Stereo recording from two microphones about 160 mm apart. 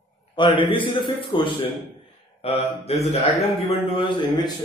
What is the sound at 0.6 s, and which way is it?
A man's voice, 30° left (ahead or behind).